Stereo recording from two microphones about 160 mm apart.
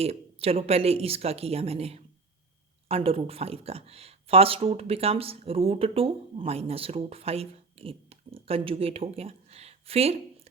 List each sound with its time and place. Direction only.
0.0 s speech: 40° right (ahead or behind)